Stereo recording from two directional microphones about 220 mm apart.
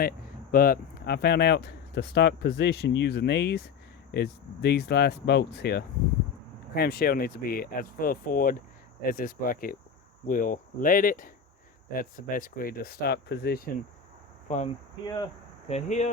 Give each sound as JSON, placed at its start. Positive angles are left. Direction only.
{"t": 0.5, "sound": "speech", "side_deg": 40}
{"t": 14.4, "sound": "speech", "side_deg": 30}
{"t": 15.0, "sound": "speech", "side_deg": 20}
{"t": 15.7, "sound": "speech", "side_deg": 30}